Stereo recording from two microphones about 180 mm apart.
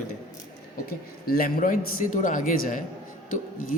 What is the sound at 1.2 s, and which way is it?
Speech, 55° left (ahead or behind).